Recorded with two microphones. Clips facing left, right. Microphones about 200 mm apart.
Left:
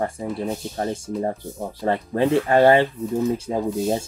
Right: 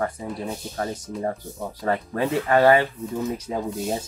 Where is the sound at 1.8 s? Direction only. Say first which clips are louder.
Left 3 dB; 25° left (ahead or behind).